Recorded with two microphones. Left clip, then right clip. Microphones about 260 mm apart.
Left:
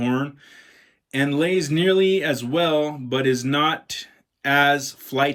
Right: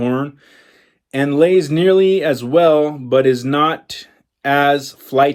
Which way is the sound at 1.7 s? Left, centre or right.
Centre.